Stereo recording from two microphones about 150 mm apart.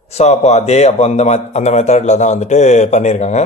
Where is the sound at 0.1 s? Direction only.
45° left (ahead or behind).